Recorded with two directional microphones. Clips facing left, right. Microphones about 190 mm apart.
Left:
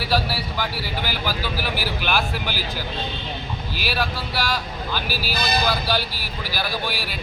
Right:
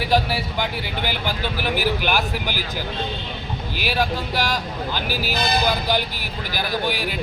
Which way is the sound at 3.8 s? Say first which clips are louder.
Right 4 dB; 15° right (ahead or behind).